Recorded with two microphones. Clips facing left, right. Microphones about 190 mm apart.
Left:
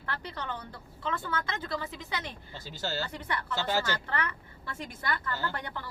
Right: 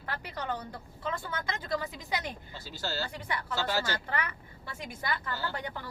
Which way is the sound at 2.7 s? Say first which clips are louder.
Left 1 dB; 20° left (ahead or behind).